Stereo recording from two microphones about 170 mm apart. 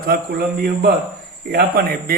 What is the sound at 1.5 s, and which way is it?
Speech, 65° right (ahead or behind).